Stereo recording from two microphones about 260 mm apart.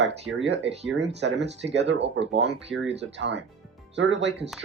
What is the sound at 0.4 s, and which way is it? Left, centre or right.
Speech, right.